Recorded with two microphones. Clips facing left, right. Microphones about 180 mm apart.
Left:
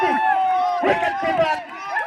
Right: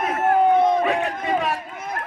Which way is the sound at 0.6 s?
50° right (ahead or behind).